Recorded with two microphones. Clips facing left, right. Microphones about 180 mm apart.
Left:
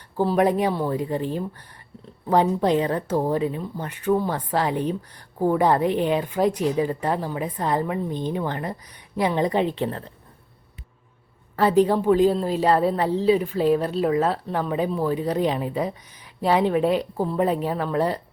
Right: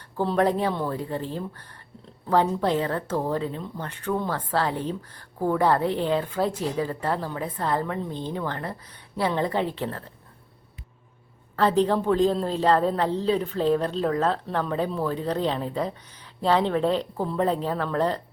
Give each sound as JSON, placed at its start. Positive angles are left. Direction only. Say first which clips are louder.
{"t": 0.2, "sound": "a woman's voice", "louder": "left 3 dB", "side_deg": 10}
{"t": 11.5, "sound": "a woman's voice", "louder": "left 3 dB", "side_deg": 10}